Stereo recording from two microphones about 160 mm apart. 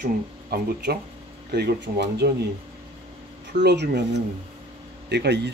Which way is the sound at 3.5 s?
90° right.